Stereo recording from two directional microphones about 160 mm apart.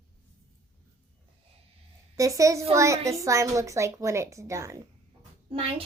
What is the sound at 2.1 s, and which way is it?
A woman's voice, 20° right (ahead or behind).